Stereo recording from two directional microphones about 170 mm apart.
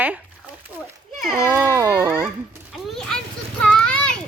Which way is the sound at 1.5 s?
20° right (ahead or behind).